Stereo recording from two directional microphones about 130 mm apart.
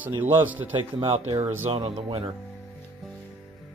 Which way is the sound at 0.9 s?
50° right (ahead or behind).